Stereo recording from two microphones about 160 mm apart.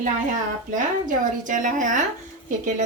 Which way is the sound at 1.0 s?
55° right (ahead or behind).